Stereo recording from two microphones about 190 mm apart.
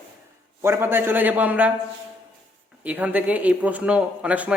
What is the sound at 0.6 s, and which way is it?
A man's voice, 10° right (ahead or behind).